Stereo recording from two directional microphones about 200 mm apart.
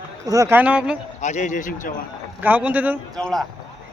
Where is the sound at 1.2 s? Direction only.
35° left (ahead or behind).